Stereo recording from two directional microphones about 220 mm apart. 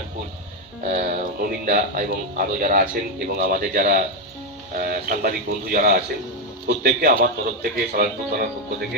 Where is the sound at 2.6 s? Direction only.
40° right (ahead or behind).